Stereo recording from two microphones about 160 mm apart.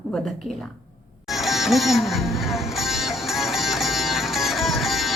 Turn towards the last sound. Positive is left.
turn(degrees=0)  # may be behind; listen again after turning